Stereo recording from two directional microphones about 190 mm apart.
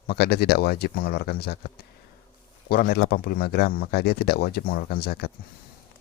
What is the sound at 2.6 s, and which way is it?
Speech, 55° left (ahead or behind).